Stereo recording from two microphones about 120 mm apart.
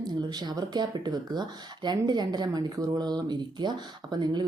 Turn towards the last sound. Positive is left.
turn(degrees=-35)  # may be behind; listen again after turning